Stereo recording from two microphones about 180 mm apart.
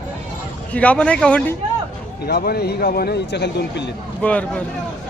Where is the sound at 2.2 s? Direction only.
60° left (ahead or behind).